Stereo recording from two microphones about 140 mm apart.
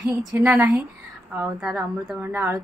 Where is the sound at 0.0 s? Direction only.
25° right (ahead or behind).